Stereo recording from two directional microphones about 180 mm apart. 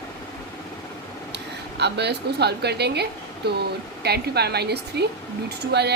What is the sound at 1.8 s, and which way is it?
A woman's voice, 70° right (ahead or behind).